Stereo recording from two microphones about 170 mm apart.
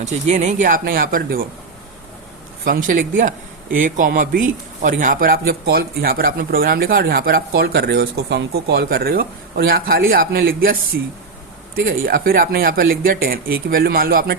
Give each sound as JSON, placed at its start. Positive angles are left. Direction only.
{"t": 0.0, "sound": "speech", "side_deg": -45}
{"t": 2.6, "sound": "speech", "side_deg": -50}